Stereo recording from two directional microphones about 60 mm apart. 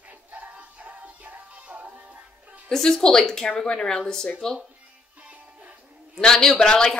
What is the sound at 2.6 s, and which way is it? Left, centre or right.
A woman's voice, centre.